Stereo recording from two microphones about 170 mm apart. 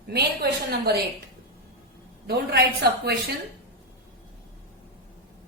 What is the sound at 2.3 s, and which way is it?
Speech, 70° right (ahead or behind).